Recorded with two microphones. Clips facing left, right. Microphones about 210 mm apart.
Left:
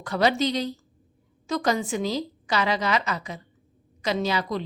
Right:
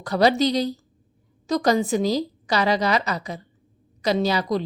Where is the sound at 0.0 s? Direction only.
35° right (ahead or behind).